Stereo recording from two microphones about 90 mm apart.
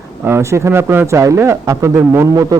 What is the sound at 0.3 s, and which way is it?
Speech, 30° right (ahead or behind).